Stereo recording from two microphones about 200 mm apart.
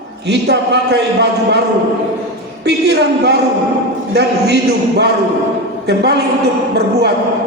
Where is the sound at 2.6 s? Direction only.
55° right (ahead or behind).